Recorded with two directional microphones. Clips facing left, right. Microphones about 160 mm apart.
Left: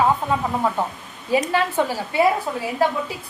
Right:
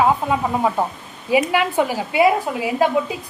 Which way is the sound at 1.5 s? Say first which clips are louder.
Right 2 dB; 15° right (ahead or behind).